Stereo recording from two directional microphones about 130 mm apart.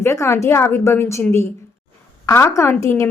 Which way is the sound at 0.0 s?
20° left (ahead or behind).